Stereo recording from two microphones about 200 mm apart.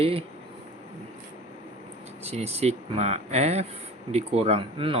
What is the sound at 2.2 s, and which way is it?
Speech, 30° right (ahead or behind).